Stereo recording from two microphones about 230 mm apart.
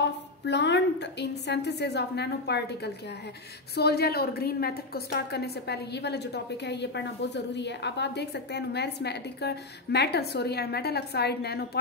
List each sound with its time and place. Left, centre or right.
0.0 s a woman's voice: left